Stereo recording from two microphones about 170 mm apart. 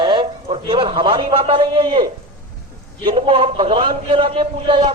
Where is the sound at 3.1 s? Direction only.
30° right (ahead or behind).